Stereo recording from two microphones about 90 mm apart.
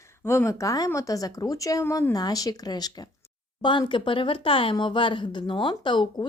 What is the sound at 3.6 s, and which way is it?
Speech, 60° left (ahead or behind).